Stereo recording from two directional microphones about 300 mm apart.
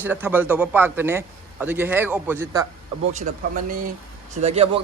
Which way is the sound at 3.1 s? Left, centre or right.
Right.